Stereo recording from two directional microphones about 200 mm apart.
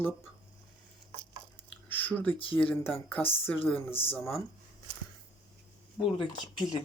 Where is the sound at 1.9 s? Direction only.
10° left (ahead or behind).